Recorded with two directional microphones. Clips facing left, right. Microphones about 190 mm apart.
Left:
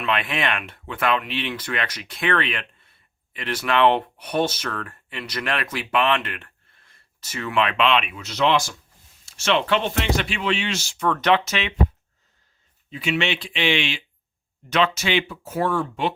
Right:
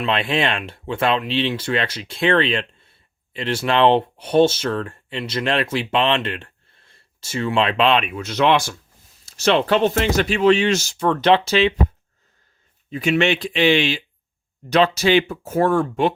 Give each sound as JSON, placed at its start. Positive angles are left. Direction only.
{"t": 0.0, "sound": "speech", "side_deg": -30}
{"t": 9.2, "sound": "speech", "side_deg": -40}
{"t": 12.9, "sound": "speech", "side_deg": -45}